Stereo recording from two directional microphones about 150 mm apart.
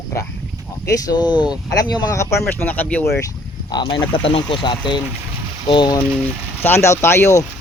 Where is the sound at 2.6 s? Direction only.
10° left (ahead or behind).